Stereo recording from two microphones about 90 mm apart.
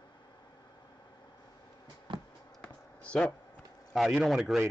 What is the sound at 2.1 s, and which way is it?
Music, 70° right (ahead or behind).